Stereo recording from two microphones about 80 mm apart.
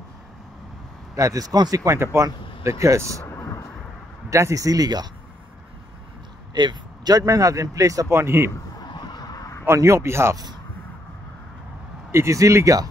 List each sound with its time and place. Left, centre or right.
1.1 s speech: right
2.2 s speech: right
3.3 s thunder: left
4.3 s speech: right
6.5 s speech: right
8.1 s speech: right
8.8 s a sound: left
9.7 s speech: right
10.3 s speech: right
12.1 s speech: right